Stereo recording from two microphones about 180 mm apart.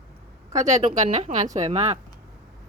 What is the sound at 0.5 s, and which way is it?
A woman's voice, 40° right (ahead or behind).